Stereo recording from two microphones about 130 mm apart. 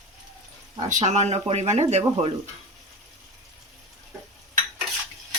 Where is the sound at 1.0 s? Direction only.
60° right (ahead or behind).